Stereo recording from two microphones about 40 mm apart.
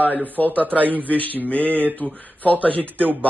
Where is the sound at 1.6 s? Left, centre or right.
Right.